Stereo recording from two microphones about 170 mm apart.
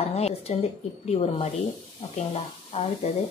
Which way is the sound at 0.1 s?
40° left (ahead or behind).